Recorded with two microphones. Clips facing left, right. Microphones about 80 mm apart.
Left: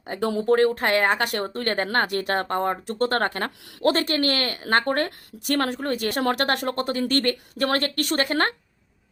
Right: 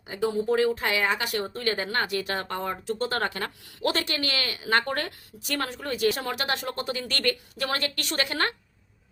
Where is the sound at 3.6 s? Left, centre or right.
Left.